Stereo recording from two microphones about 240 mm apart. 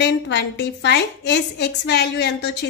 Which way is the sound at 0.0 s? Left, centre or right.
Left.